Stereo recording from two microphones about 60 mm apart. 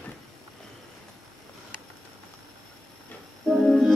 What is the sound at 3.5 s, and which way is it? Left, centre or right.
Music, centre.